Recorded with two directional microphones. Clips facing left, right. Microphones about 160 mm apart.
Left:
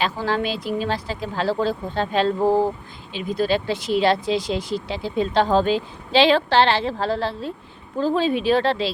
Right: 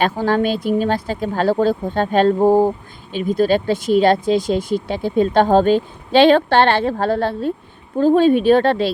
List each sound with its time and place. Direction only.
0.0 s speech: 50° right (ahead or behind)